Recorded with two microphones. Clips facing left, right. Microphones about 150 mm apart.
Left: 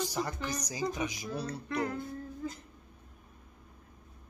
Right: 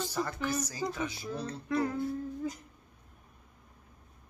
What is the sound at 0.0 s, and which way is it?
A woman's voice, 15° left (ahead or behind).